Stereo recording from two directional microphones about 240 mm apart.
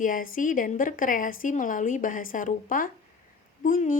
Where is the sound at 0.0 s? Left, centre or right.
Left.